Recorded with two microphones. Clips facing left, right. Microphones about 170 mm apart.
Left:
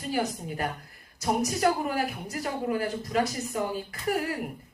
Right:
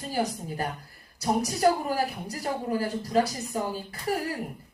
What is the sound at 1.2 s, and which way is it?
A woman's voice, 35° right (ahead or behind).